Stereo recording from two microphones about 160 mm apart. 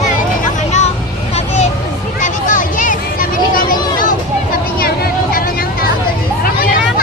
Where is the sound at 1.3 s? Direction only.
40° left (ahead or behind).